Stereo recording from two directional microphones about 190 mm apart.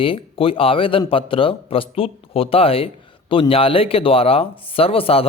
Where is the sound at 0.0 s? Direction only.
30° left (ahead or behind).